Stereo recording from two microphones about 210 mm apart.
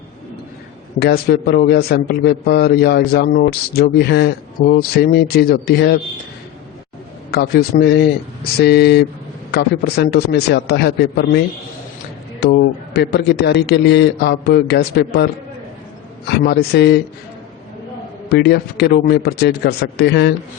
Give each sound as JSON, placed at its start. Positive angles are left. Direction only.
{"t": 0.9, "sound": "a man's voice", "side_deg": 50}
{"t": 7.3, "sound": "a man's voice", "side_deg": 50}
{"t": 16.5, "sound": "a man's voice", "side_deg": 50}
{"t": 18.3, "sound": "a man's voice", "side_deg": 50}